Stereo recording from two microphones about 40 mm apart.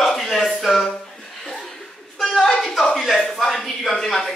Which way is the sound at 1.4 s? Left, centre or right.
Centre.